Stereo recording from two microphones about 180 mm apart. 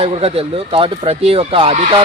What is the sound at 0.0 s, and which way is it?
Speech, 35° right (ahead or behind).